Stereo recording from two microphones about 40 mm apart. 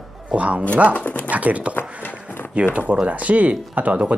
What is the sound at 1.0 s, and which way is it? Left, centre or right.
Speech, left.